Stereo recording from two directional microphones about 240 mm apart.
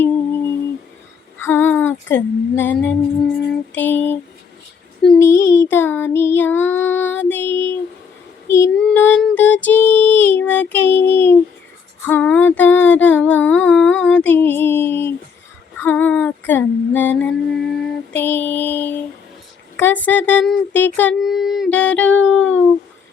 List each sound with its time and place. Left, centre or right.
1.4 s speech: centre
3.8 s a sound: centre
5.0 s child singing: centre
12.0 s a sound: centre
15.8 s mantra: centre
19.7 s speech: centre